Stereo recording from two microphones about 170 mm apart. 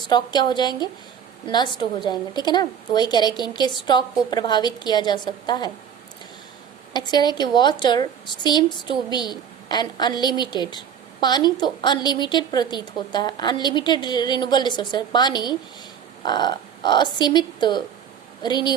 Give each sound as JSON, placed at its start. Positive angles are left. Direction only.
{"t": 0.1, "sound": "a woman's voice", "side_deg": 25}
{"t": 6.9, "sound": "a woman's voice", "side_deg": 25}